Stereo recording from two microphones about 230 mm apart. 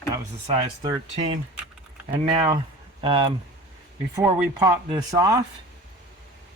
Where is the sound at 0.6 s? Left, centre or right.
Centre.